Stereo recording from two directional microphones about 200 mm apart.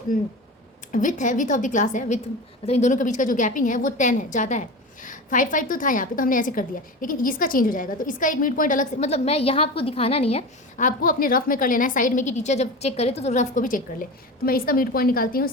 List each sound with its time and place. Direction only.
0.9 s a woman's voice: 40° left (ahead or behind)